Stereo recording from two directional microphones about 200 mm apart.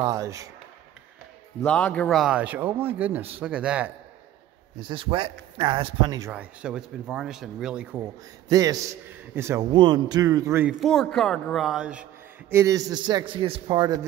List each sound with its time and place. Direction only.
0.0 s a man's voice: 15° right (ahead or behind)
1.6 s speech: 5° left (ahead or behind)
4.7 s speech: 25° right (ahead or behind)
6.3 s speech: 5° right (ahead or behind)
8.5 s a man's voice: 15° right (ahead or behind)